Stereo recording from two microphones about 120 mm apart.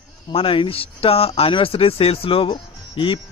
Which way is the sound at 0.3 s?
50° left (ahead or behind).